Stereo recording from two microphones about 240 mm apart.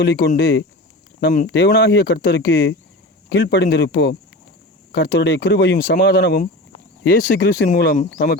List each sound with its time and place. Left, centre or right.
0.0 s speech: left
1.5 s speech: left